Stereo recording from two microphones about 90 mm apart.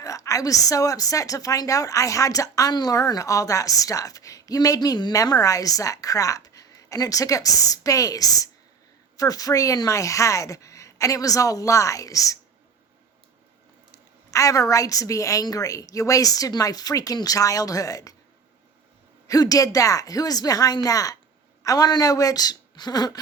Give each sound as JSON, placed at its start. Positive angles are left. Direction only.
{"t": 0.0, "sound": "a woman's voice", "side_deg": 35}
{"t": 5.1, "sound": "a woman's voice", "side_deg": 40}
{"t": 13.9, "sound": "a woman's voice", "side_deg": 35}
{"t": 19.3, "sound": "speech", "side_deg": 40}